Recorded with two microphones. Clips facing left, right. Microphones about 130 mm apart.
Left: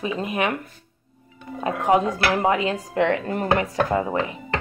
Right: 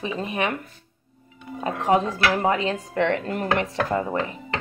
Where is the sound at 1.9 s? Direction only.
20° left (ahead or behind).